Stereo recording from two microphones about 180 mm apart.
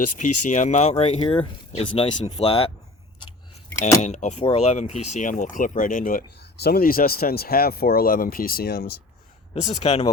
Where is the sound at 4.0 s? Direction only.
40° left (ahead or behind); by 8.9 s 60° left (ahead or behind).